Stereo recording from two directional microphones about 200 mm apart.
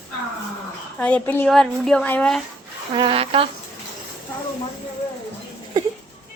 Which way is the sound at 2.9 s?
25° right (ahead or behind).